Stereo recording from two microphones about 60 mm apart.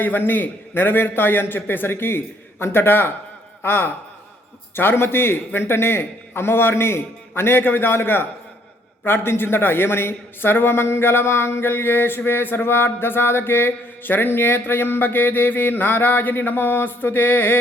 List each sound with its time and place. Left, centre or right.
0.0 s a man's voice: left